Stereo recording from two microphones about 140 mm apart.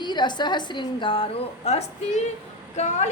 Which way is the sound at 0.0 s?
30° left (ahead or behind).